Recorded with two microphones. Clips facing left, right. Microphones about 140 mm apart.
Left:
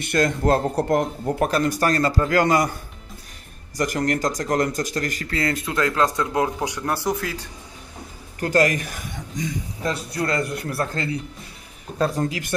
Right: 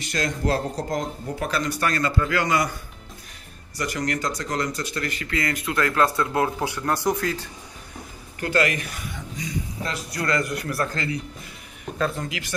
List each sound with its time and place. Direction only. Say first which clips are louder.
0.0 s speech: left 5 dB; 55° left (ahead or behind)
3.7 s speech: left 4 dB; 45° left (ahead or behind)
5.7 s speech: right 1 dB; 20° left (ahead or behind)
7.0 s speech: right 1 dB; 5° left (ahead or behind)
8.4 s speech: left 4 dB; 40° left (ahead or behind)
9.8 s speech: left 4 dB; 30° left (ahead or behind)